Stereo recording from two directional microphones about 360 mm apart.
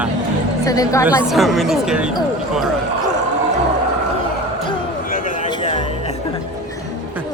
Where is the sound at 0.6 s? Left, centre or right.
Centre.